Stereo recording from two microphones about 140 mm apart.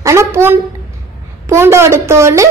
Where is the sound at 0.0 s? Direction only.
20° right (ahead or behind).